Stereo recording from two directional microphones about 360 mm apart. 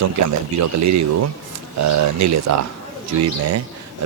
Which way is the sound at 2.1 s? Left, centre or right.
Right.